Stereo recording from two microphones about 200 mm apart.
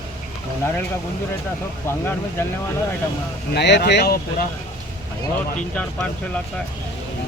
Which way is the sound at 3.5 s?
55° left (ahead or behind).